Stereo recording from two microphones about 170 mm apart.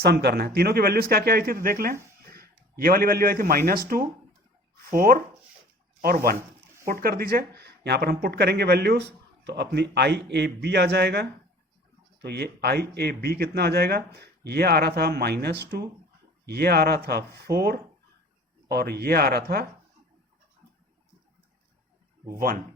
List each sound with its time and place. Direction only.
0.0 s speech: 70° right (ahead or behind)
2.2 s a sound: 60° right (ahead or behind)
3.7 s speech: 60° right (ahead or behind)
22.4 s speech: 55° right (ahead or behind)